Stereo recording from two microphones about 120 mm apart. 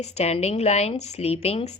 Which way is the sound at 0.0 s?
65° left (ahead or behind).